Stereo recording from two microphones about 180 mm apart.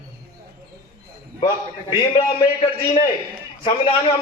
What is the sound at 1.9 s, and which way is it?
A man's voice, 30° left (ahead or behind).